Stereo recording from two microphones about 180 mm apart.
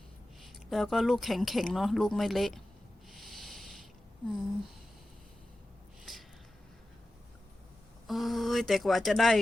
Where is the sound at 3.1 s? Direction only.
Centre (ahead or behind).